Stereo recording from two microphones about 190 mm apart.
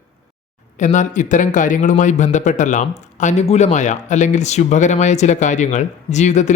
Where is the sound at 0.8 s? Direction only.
40° left (ahead or behind).